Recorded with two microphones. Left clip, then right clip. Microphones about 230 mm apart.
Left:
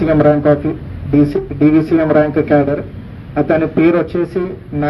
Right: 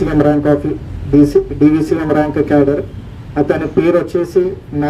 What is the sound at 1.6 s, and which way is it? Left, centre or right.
A man's voice, right.